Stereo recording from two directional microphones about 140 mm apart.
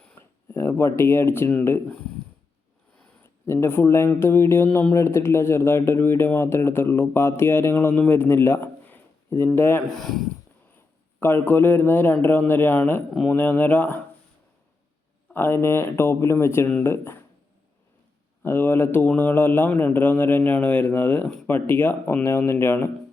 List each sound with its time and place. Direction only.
0.0 s a sound: 10° left (ahead or behind)
0.5 s speech: 20° left (ahead or behind)
3.4 s speech: 20° left (ahead or behind)
9.8 s speech: centre (ahead or behind)
11.2 s speech: 15° left (ahead or behind)
15.3 s speech: 15° left (ahead or behind)
18.4 s speech: 15° left (ahead or behind)